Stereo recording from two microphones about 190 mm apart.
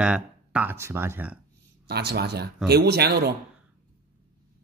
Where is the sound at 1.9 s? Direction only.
60° right (ahead or behind).